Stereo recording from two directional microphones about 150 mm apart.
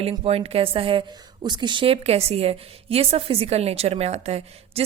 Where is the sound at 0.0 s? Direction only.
40° right (ahead or behind).